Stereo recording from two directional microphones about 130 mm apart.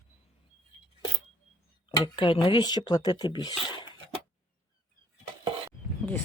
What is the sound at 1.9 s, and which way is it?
Speech, 40° left (ahead or behind).